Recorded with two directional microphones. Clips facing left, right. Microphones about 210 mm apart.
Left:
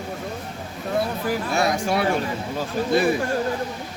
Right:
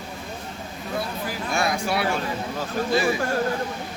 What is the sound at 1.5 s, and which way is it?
Speech, 40° left (ahead or behind).